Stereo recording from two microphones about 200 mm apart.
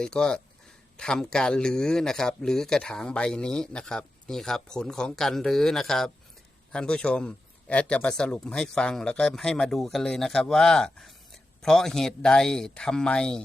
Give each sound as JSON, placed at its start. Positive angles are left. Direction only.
{"t": 0.0, "sound": "speech", "side_deg": 5}